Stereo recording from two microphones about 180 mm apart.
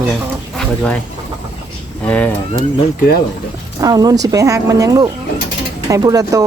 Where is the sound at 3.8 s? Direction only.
20° right (ahead or behind).